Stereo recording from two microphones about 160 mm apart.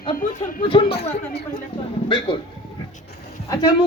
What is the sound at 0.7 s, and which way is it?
Speech, 35° left (ahead or behind).